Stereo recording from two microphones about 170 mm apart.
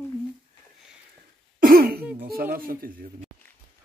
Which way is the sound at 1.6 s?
60° right (ahead or behind).